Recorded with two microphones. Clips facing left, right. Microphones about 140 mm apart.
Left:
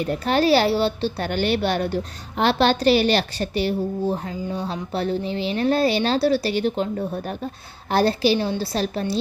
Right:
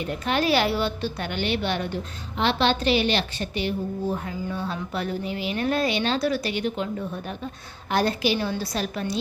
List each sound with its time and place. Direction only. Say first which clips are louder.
0.0 s a woman's voice: left 5 dB; 35° left (ahead or behind)